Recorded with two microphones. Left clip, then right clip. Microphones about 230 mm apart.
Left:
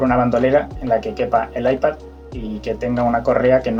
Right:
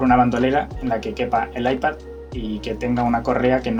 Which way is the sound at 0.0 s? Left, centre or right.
Right.